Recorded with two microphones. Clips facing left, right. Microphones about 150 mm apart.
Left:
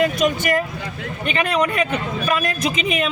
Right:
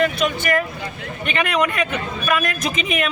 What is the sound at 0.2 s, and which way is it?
A man's voice, 40° left (ahead or behind).